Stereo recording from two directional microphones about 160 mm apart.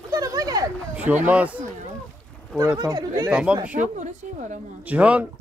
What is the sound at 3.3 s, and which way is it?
Speech, 5° right (ahead or behind).